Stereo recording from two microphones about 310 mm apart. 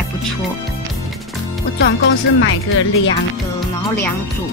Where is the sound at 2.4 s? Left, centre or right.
Left.